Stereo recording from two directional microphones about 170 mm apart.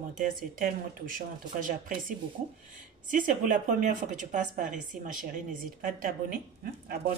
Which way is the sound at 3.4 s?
50° right (ahead or behind).